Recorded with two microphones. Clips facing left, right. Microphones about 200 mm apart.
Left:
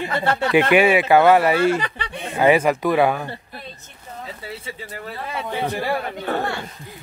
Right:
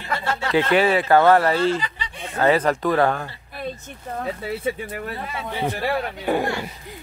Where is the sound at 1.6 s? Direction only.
65° left (ahead or behind).